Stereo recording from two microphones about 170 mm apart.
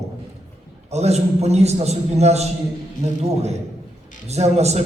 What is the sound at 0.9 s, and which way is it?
A man's voice, 40° right (ahead or behind).